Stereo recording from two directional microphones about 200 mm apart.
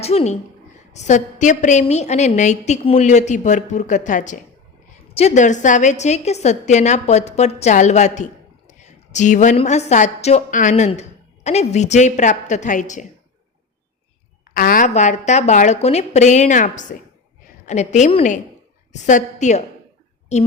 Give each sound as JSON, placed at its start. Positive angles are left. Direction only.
{"t": 0.0, "sound": "a woman's voice", "side_deg": 30}
{"t": 14.5, "sound": "a woman's voice", "side_deg": 45}